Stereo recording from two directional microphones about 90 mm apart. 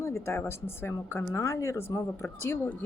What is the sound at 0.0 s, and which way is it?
A woman's voice, 30° left (ahead or behind).